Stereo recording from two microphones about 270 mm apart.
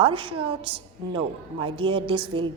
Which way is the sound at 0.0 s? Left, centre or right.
Centre.